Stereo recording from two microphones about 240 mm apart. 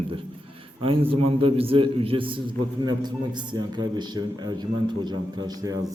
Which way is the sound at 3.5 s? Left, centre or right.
Centre.